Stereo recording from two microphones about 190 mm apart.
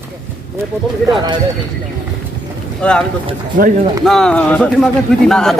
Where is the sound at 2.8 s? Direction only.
5° left (ahead or behind).